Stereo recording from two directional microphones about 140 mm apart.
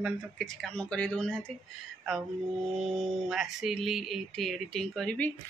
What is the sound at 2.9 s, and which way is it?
Speech, centre (ahead or behind).